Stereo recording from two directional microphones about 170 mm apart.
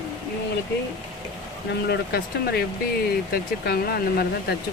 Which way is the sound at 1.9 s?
70° left (ahead or behind).